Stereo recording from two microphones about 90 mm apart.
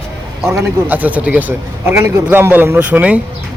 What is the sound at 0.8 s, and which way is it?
Speech, 20° right (ahead or behind).